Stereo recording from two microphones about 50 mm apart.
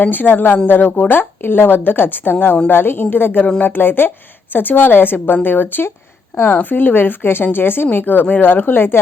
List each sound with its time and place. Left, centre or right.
0.0 s speech: left